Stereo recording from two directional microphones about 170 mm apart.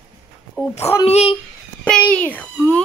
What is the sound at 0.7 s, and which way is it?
Speech, 15° left (ahead or behind).